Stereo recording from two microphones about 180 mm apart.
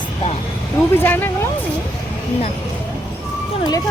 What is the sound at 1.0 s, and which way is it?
Speech, 10° left (ahead or behind).